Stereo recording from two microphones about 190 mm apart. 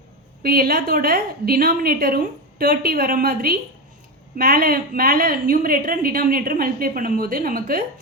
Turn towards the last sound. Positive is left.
turn(degrees=-50)  # may be behind; listen again after turning